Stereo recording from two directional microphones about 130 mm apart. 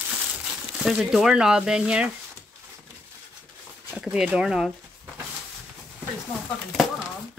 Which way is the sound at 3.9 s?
5° right (ahead or behind).